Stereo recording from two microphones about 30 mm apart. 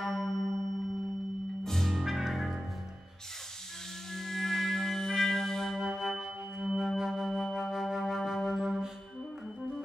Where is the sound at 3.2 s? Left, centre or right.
Centre.